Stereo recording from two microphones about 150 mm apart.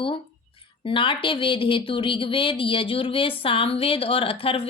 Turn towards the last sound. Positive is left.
turn(degrees=40)  # may be behind; listen again after turning